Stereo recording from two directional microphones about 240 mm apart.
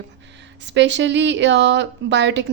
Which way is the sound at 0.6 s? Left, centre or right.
Right.